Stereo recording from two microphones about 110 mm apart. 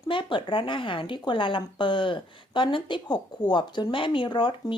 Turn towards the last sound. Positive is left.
turn(degrees=50)  # may be behind; listen again after turning